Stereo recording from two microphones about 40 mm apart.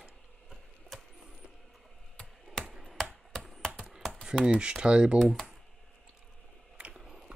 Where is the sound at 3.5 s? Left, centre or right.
Centre.